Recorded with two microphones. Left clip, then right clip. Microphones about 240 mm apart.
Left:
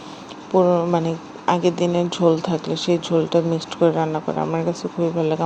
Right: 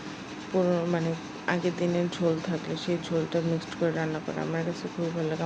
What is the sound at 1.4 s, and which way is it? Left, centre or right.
Speech, left.